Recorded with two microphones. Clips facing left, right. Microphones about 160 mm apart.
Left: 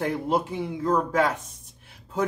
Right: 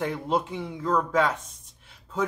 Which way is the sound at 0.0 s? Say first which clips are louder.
Left 2 dB; 10° left (ahead or behind).